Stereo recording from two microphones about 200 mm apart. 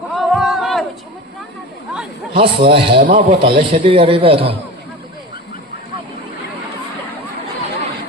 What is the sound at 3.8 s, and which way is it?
Speech, 25° right (ahead or behind).